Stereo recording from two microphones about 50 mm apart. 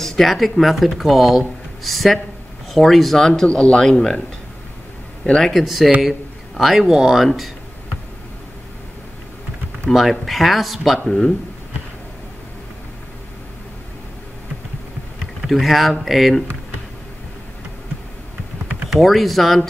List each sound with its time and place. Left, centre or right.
0.0 s speech: centre
3.4 s speech: left
5.5 s a man's voice: centre
9.9 s speech: centre
15.5 s speech: centre
18.9 s speech: centre